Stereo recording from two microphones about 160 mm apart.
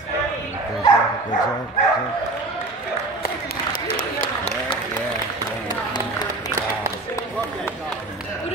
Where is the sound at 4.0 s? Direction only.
50° left (ahead or behind).